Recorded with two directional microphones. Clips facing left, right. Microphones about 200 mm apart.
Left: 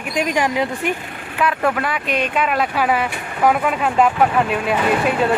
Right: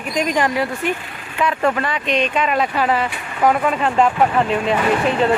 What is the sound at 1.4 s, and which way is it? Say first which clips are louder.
Speech: right 1 dB; 5° left (ahead or behind).